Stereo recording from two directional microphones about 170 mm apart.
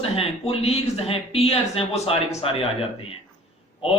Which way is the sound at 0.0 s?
35° left (ahead or behind).